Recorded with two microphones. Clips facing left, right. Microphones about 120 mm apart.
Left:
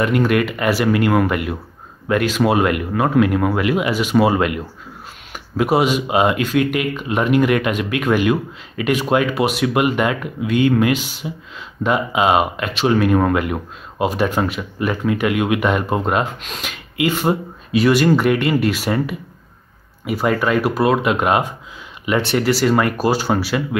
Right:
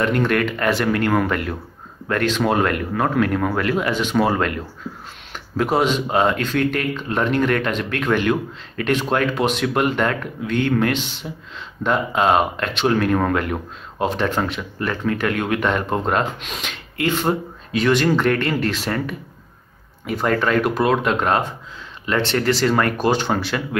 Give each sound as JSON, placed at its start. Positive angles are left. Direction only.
{"t": 0.0, "sound": "speech", "side_deg": 5}